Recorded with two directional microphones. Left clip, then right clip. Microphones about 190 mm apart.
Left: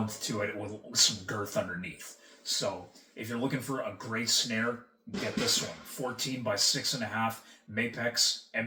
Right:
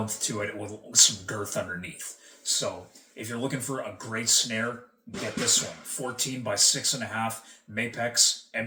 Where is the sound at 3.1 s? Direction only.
15° right (ahead or behind).